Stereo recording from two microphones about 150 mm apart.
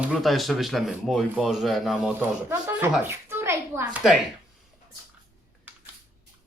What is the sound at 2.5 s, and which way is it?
A woman's voice, 15° right (ahead or behind).